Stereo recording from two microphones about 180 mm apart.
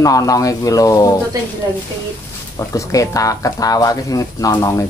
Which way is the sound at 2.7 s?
20° left (ahead or behind).